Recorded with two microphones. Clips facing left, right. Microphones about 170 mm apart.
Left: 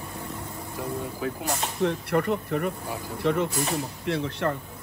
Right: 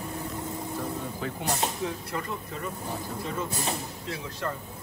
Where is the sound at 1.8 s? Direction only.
65° left (ahead or behind).